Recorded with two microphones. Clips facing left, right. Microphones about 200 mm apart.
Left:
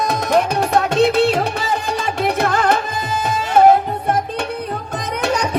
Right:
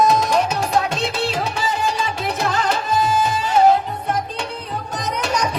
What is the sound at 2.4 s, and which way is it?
Music, 60° left (ahead or behind).